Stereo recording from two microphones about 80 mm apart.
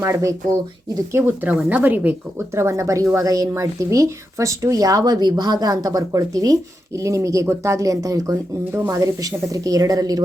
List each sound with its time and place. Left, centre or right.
0.0 s speech: right
1.4 s speech: right
2.6 s speech: right